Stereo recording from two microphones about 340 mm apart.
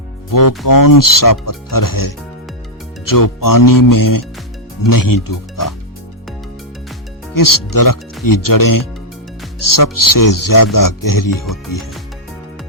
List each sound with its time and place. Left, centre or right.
0.3 s speech: left
7.3 s speech: left